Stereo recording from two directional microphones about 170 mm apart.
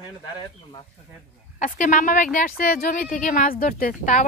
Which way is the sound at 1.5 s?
50° left (ahead or behind).